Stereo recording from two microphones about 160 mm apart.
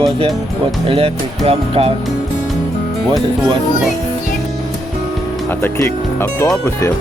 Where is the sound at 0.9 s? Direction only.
35° right (ahead or behind).